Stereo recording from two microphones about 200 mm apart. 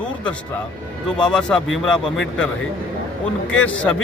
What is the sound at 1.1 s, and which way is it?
A man's voice, 5° left (ahead or behind).